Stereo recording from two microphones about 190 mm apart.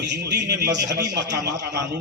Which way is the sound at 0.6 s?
20° right (ahead or behind).